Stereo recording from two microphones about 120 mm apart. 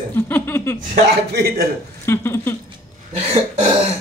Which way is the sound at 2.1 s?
20° left (ahead or behind).